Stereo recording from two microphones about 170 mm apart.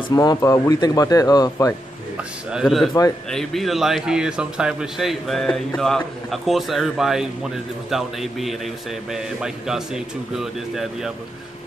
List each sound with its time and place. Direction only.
0.1 s speech: 20° left (ahead or behind)
2.5 s a man's voice: centre (ahead or behind)